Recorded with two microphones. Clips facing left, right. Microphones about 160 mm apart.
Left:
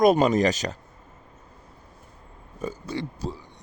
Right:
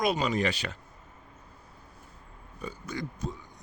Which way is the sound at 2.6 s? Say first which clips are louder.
Left 6 dB; 35° left (ahead or behind).